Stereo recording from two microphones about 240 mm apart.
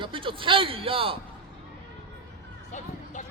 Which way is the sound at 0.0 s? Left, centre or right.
Right.